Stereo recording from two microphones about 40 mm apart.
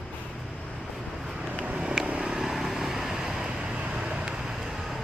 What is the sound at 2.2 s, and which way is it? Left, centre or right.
Vehicle, centre.